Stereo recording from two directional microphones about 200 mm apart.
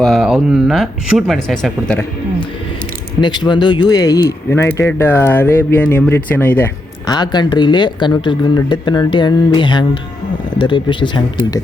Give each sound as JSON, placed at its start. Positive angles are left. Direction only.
{"t": 0.0, "sound": "speech", "side_deg": 0}
{"t": 3.2, "sound": "speech", "side_deg": 20}
{"t": 7.1, "sound": "speech", "side_deg": 20}